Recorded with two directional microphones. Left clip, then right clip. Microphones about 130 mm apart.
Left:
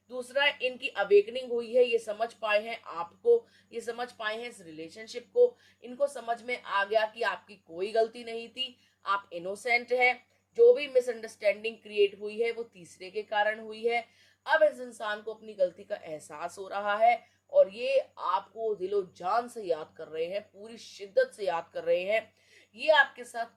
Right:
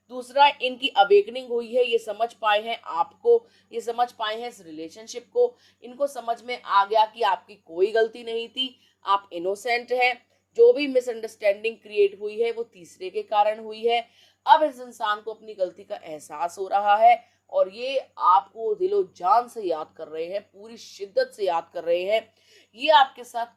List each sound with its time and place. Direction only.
0.1 s a woman's voice: 45° right (ahead or behind)